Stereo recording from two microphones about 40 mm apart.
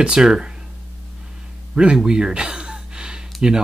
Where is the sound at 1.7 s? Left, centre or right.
Right.